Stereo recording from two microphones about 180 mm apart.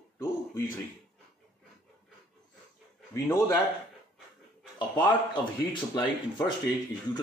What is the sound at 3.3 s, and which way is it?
Speech, 15° left (ahead or behind).